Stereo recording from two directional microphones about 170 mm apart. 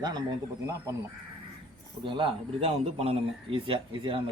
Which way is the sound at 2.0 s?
30° right (ahead or behind).